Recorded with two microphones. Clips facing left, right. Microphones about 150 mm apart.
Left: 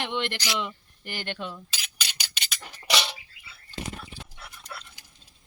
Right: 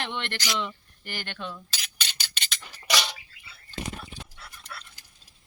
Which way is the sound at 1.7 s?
5° left (ahead or behind).